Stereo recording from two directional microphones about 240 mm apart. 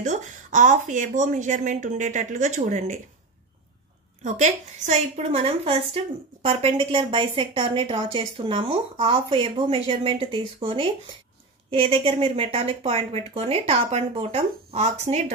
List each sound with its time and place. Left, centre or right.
0.0 s speech: right
4.2 s a woman's voice: right